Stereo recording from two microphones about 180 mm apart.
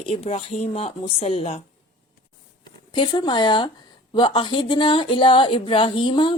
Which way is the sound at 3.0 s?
25° left (ahead or behind).